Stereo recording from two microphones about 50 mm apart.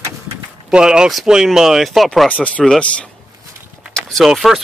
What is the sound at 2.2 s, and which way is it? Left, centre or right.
Speech, left.